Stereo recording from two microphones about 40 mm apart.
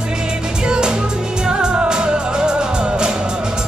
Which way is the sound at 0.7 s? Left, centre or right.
Right.